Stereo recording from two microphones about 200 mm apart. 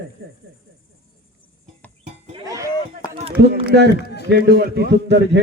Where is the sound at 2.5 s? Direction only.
15° right (ahead or behind).